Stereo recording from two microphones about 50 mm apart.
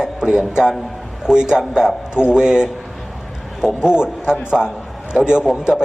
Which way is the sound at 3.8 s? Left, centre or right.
Centre.